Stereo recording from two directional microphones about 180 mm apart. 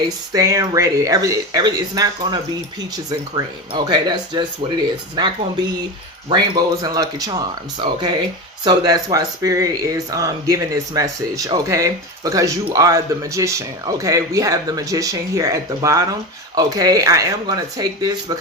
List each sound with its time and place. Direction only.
0.3 s speech: 20° right (ahead or behind)